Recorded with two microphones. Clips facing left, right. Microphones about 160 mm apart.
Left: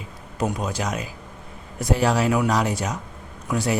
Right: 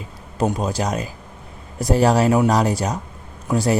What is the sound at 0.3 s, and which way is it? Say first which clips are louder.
Speech: right 4 dB; 30° right (ahead or behind).